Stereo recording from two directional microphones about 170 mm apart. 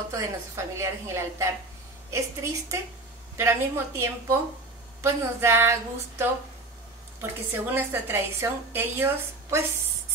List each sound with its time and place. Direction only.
0.1 s a woman's voice: 15° right (ahead or behind)